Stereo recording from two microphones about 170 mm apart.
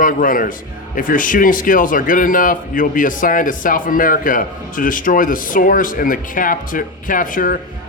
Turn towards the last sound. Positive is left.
turn(degrees=55)  # may be behind; listen again after turning